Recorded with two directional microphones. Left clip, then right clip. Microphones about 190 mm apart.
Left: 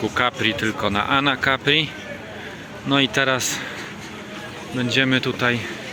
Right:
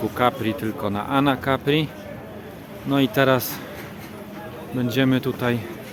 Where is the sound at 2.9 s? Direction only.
10° right (ahead or behind).